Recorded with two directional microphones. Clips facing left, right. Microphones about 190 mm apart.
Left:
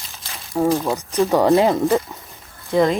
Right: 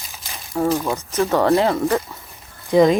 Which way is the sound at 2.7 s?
15° right (ahead or behind).